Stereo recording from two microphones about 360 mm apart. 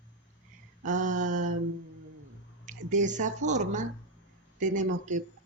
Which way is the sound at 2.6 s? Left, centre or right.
Right.